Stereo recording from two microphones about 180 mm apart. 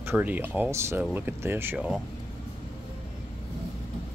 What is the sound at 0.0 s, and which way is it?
Speech, 10° right (ahead or behind).